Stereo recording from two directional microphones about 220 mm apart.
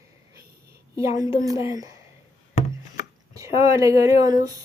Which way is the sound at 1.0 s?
15° right (ahead or behind).